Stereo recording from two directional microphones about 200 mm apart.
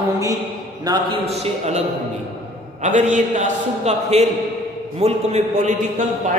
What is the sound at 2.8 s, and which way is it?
A man's voice, 40° right (ahead or behind).